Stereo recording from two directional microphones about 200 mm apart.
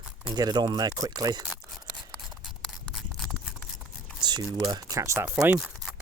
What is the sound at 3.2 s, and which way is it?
Scissors, centre (ahead or behind).